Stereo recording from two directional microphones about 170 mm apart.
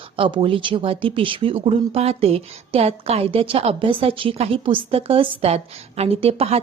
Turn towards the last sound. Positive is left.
turn(degrees=-35)  # may be behind; listen again after turning